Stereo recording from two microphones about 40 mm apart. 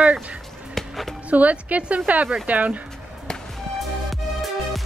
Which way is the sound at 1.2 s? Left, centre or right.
Right.